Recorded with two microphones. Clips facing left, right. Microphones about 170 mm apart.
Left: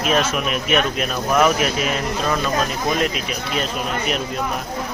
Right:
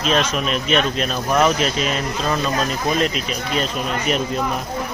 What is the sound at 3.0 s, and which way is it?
Speech, 5° left (ahead or behind).